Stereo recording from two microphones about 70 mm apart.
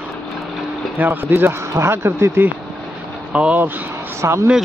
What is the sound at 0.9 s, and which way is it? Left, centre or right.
Speech, right.